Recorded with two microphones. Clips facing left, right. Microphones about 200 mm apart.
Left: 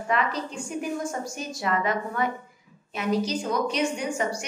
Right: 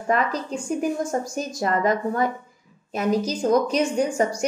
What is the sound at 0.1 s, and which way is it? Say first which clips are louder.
A woman's voice: right 4 dB; 40° right (ahead or behind).